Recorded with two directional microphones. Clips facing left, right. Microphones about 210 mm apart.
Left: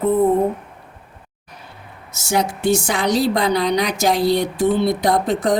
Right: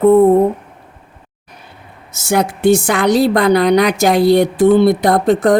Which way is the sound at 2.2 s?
55° right (ahead or behind).